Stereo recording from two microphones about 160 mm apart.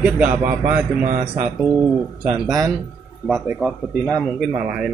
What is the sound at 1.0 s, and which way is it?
Speech, 45° right (ahead or behind).